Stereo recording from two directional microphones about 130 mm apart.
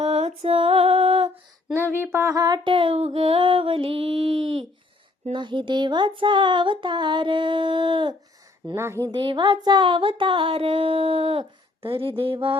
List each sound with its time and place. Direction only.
0.0 s music: 55° right (ahead or behind)
2.1 s a sound: 25° right (ahead or behind); by 4.6 s 45° right (ahead or behind)
5.3 s speech: 35° right (ahead or behind)
8.7 s speech: 20° right (ahead or behind)
9.1 s speech: 35° right (ahead or behind)
9.6 s a sound: 35° right (ahead or behind)